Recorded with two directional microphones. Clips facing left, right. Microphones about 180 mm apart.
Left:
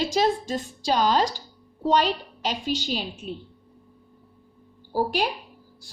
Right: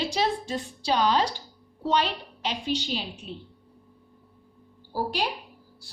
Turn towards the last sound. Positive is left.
turn(degrees=50)  # may be behind; listen again after turning